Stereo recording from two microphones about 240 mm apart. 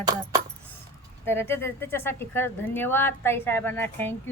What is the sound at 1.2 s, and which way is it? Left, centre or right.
Speech, centre.